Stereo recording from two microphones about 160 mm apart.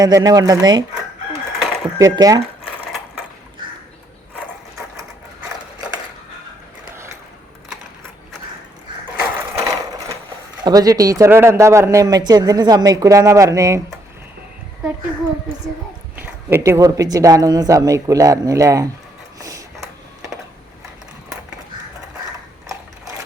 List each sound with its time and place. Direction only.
0.0 s a man's voice: 20° right (ahead or behind)
1.5 s a sound: centre (ahead or behind)
2.0 s a man's voice: 20° right (ahead or behind)
9.1 s sewing machine: 20° right (ahead or behind)
10.6 s a man's voice: 25° right (ahead or behind)
16.1 s a man's voice: 15° right (ahead or behind)
19.4 s a sound: 20° right (ahead or behind)